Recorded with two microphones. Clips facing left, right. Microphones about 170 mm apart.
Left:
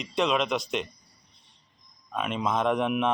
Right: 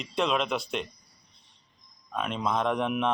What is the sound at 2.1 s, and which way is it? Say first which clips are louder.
Speech: left 1 dB; 5° left (ahead or behind).